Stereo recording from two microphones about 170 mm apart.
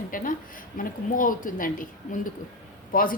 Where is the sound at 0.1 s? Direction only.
55° left (ahead or behind).